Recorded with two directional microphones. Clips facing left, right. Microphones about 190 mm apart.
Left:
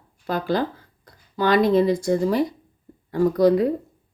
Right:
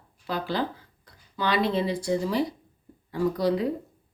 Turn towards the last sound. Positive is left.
turn(degrees=50)  # may be behind; listen again after turning